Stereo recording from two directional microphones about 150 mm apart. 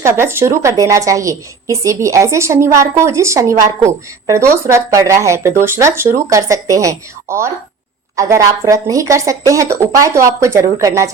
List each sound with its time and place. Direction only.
0.0 s a woman's voice: 15° right (ahead or behind)